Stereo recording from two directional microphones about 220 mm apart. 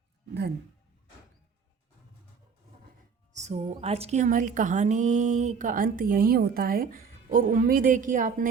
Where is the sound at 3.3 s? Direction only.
30° right (ahead or behind).